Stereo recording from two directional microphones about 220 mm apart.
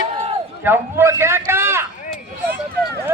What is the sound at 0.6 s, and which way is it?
A man's voice, 10° right (ahead or behind).